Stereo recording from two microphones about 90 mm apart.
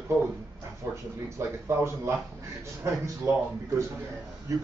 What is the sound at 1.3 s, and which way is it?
Speech, 30° right (ahead or behind).